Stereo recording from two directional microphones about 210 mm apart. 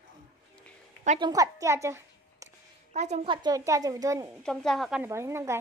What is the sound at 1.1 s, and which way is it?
A woman's voice, 20° right (ahead or behind).